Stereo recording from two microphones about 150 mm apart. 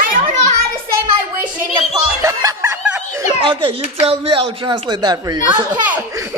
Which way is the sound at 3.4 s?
35° right (ahead or behind).